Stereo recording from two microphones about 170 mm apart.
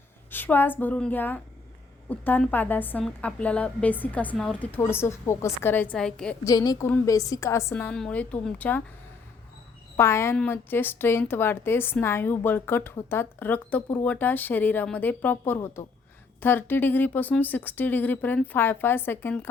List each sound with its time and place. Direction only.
0.3 s a woman's voice: 10° left (ahead or behind)
6.4 s a woman's voice: 20° left (ahead or behind)
10.0 s a woman's voice: 15° left (ahead or behind)